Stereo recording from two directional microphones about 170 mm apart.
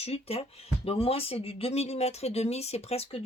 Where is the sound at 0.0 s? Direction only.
35° left (ahead or behind).